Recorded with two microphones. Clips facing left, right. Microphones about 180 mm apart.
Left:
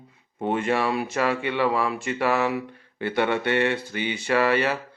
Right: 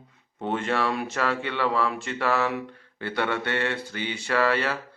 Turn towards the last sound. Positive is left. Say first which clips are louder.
# left 3 dB
turn(degrees=15)  # may be behind; listen again after turning